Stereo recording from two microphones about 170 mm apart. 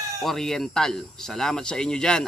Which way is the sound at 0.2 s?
Centre (ahead or behind).